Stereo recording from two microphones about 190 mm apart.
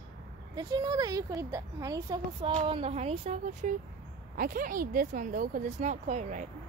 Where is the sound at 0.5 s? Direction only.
20° right (ahead or behind); by 6.5 s 40° right (ahead or behind).